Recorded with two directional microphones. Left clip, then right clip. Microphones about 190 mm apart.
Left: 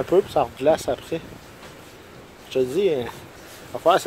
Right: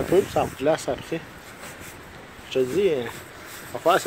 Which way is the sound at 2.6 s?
5° left (ahead or behind).